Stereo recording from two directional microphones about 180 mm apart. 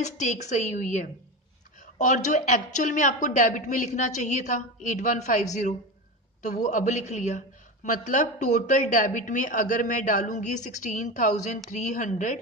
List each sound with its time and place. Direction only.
0.0 s a woman's voice: 40° left (ahead or behind)